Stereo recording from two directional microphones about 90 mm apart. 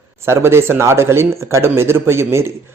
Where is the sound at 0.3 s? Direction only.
30° right (ahead or behind).